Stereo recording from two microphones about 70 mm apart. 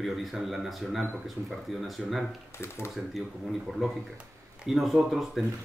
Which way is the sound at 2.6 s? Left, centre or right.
Left.